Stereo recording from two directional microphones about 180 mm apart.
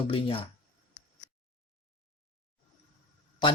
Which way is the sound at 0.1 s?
30° left (ahead or behind).